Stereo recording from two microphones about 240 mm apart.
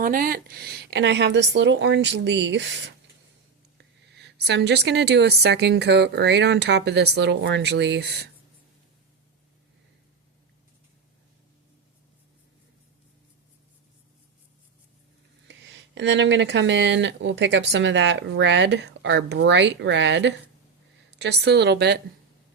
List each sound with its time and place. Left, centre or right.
0.0 s a woman's voice: right
16.0 s a woman's voice: right